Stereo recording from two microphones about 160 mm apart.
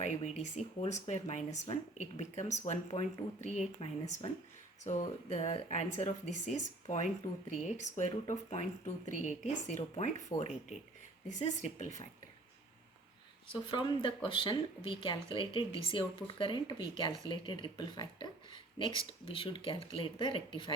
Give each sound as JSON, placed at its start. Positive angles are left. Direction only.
{"t": 0.0, "sound": "speech", "side_deg": 45}
{"t": 13.5, "sound": "speech", "side_deg": 30}